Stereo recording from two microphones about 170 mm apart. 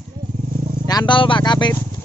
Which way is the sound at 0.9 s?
25° left (ahead or behind).